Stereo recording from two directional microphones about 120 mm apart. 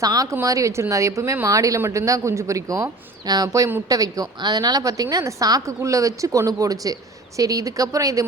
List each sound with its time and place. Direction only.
0.0 s speech: 30° right (ahead or behind)